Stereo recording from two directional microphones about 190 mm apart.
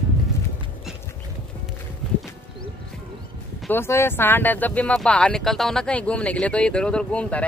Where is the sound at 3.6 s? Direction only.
10° left (ahead or behind).